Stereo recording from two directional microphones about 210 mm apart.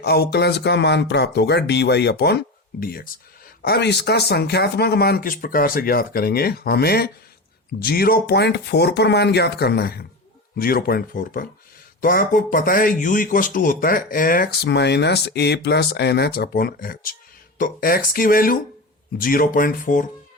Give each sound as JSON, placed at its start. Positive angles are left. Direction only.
{"t": 0.0, "sound": "speech", "side_deg": 50}
{"t": 3.6, "sound": "speech", "side_deg": 50}